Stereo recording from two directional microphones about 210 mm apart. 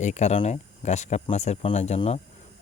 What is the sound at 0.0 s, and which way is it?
Speech, 35° left (ahead or behind).